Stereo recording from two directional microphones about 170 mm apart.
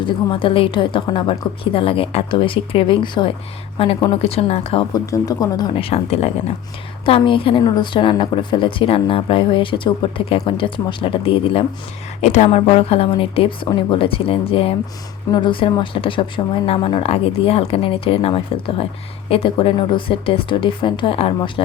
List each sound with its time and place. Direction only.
0.0 s speech: 30° left (ahead or behind)
5.1 s speech: 20° left (ahead or behind)
12.2 s a woman's voice: 45° left (ahead or behind)
12.5 s speech: 30° left (ahead or behind)